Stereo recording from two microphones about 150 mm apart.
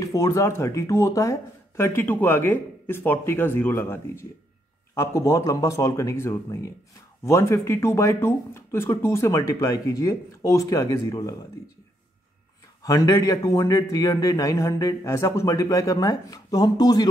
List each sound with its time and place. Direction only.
0.0 s a man's voice: 20° left (ahead or behind)
12.8 s a man's voice: 25° left (ahead or behind)